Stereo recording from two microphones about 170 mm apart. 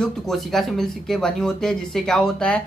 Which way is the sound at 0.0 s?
Centre (ahead or behind).